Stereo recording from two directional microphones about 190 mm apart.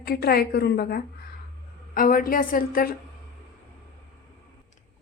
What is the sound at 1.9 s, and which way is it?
A woman's voice, 45° left (ahead or behind).